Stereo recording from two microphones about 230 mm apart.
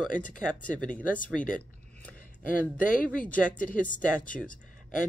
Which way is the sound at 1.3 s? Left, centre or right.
Centre.